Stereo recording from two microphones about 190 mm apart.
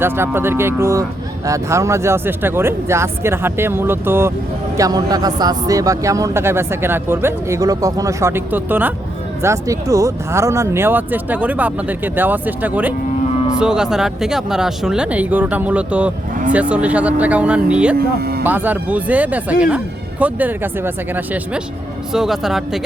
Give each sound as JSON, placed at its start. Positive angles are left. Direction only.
{"t": 0.0, "sound": "a man's voice", "side_deg": -10}
{"t": 17.9, "sound": "speech", "side_deg": -55}
{"t": 18.4, "sound": "a man's voice", "side_deg": -10}